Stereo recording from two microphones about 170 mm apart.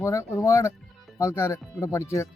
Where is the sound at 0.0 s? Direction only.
20° left (ahead or behind).